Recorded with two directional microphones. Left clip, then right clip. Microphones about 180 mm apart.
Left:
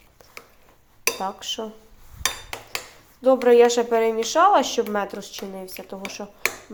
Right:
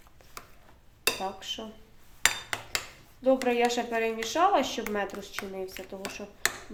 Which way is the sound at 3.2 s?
20° left (ahead or behind).